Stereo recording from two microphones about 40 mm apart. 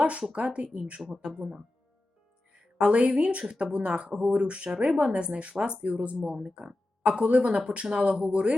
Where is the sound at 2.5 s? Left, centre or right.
Right.